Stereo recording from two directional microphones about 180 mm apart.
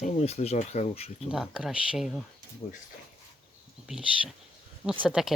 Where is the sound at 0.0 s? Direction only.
35° left (ahead or behind).